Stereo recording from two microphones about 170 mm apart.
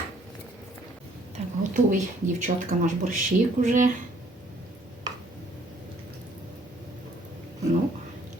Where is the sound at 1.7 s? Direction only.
50° right (ahead or behind).